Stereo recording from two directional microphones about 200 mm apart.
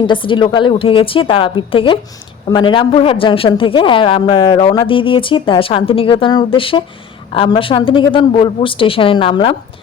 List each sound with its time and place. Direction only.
0.1 s speech: 25° left (ahead or behind)